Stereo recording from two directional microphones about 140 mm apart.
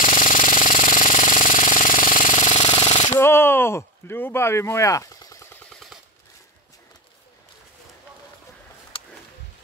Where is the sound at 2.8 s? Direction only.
50° left (ahead or behind).